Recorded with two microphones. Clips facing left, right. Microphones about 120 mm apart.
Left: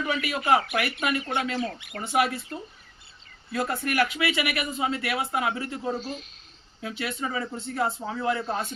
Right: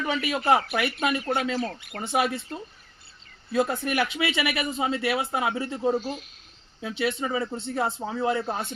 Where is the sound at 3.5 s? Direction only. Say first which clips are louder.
Right 1 dB; 25° right (ahead or behind).